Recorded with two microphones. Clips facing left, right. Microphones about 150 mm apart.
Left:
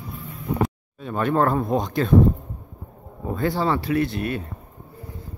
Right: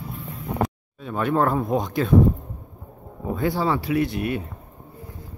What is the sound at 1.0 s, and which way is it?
Speech, 5° right (ahead or behind).